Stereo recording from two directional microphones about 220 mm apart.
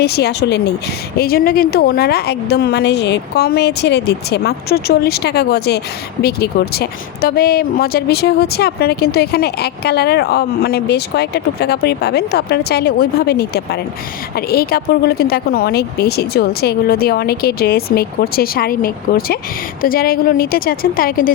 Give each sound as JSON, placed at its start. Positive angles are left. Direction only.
{"t": 0.0, "sound": "a woman's voice", "side_deg": 45}